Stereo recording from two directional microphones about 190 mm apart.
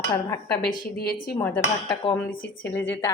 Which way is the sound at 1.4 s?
5° left (ahead or behind).